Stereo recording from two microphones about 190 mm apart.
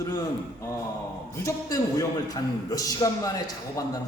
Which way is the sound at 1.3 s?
15° left (ahead or behind).